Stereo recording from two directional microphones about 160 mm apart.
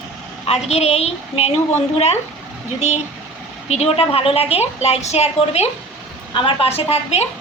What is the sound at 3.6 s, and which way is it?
A woman's voice, 40° left (ahead or behind).